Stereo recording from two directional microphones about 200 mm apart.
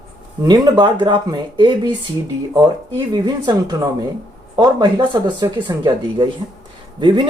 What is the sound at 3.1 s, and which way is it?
Speech, 20° right (ahead or behind).